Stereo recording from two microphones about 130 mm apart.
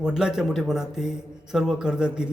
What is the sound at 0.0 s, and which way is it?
A man's voice, 5° right (ahead or behind).